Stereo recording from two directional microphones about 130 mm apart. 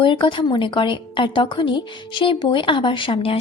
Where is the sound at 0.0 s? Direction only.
40° left (ahead or behind).